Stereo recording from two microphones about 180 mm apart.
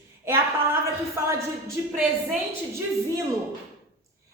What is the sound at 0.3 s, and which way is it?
A woman's voice, 15° right (ahead or behind).